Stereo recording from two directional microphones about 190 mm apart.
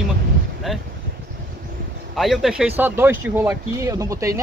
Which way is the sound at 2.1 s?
Centre (ahead or behind).